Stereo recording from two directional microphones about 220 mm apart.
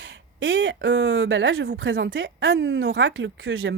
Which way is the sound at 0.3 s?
60° right (ahead or behind).